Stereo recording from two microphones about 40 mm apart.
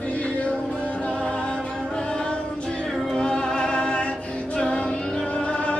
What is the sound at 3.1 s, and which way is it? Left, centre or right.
Music, left.